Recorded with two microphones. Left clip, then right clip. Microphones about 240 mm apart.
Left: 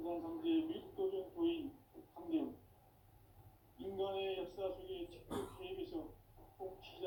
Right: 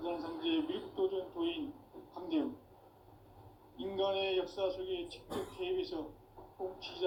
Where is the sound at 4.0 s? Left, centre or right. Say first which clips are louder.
Right 7 dB; right.